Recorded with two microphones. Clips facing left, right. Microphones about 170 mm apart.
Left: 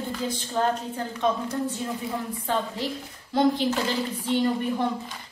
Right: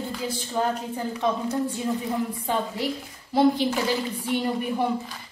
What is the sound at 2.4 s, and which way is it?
Speech, 10° right (ahead or behind).